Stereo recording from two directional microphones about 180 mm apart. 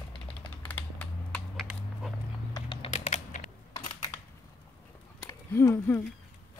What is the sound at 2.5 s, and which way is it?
Typing, 25° left (ahead or behind).